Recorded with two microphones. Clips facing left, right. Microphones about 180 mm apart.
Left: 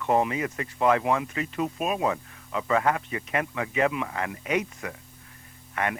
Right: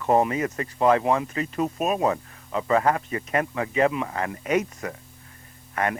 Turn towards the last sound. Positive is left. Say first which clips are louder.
# right 3 dB
turn(degrees=-40)  # may be behind; listen again after turning